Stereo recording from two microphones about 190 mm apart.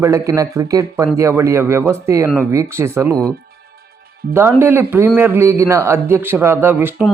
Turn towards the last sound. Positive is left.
turn(degrees=-10)  # may be behind; listen again after turning